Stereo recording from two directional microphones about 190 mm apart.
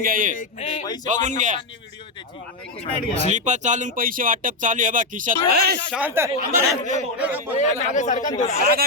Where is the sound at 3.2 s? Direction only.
40° right (ahead or behind).